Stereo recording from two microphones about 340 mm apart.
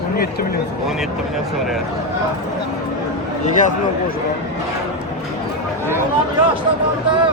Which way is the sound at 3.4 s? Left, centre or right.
Left.